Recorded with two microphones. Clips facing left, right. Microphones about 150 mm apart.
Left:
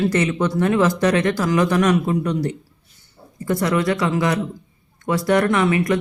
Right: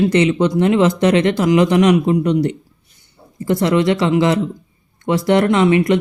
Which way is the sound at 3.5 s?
25° right (ahead or behind).